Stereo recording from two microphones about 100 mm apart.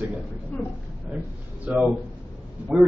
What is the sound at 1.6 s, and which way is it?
Speech, 10° right (ahead or behind).